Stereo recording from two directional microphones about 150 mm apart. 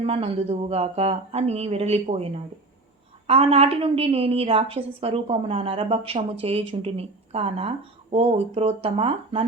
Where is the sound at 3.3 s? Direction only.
40° right (ahead or behind).